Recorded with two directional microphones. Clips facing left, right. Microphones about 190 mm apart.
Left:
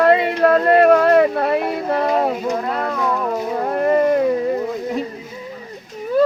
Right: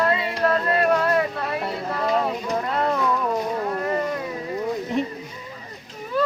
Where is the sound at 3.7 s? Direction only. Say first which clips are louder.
Left 9 dB; 55° left (ahead or behind).